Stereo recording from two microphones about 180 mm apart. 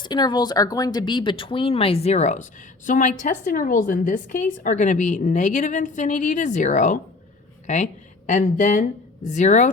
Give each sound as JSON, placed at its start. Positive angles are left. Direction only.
{"t": 0.0, "sound": "a woman's voice", "side_deg": 25}